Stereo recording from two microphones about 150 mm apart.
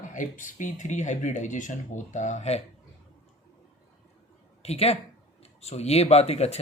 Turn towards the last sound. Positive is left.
turn(degrees=45)  # may be behind; listen again after turning